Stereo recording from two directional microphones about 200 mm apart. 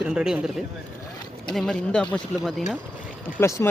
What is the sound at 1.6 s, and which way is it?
Speech, centre (ahead or behind).